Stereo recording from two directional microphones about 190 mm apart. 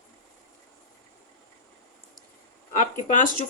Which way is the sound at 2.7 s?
40° left (ahead or behind).